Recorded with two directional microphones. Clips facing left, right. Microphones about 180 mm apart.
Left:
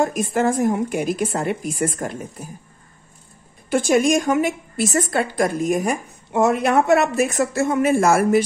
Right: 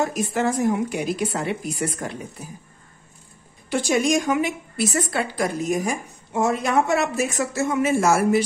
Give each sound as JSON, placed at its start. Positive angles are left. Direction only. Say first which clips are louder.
{"t": 0.0, "sound": "a woman's voice", "louder": "left 3 dB", "side_deg": 50}
{"t": 3.7, "sound": "a woman's voice", "louder": "left 4 dB", "side_deg": 50}